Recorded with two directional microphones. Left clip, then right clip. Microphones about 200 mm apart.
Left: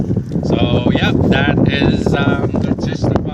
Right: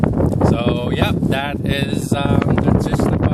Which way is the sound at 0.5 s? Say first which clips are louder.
Left 4 dB; 45° right (ahead or behind).